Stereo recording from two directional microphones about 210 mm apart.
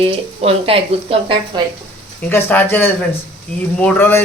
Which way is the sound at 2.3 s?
10° left (ahead or behind).